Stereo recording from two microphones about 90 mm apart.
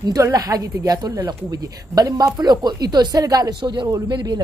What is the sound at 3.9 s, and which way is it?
Speech, 50° right (ahead or behind).